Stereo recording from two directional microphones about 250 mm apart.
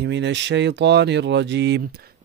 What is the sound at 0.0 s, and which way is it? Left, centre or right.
Speech, right.